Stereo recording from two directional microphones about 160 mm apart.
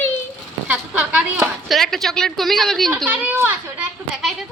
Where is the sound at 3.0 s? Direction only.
10° right (ahead or behind).